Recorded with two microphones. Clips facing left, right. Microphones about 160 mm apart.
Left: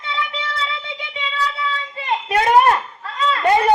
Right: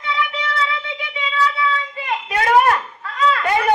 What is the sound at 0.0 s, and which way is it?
Child singing, 25° left (ahead or behind).